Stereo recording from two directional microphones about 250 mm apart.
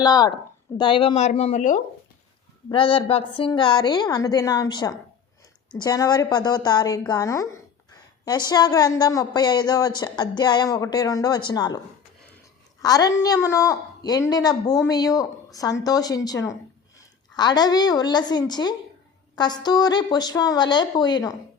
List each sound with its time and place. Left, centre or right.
0.0 s a woman's voice: centre
12.8 s a woman's voice: centre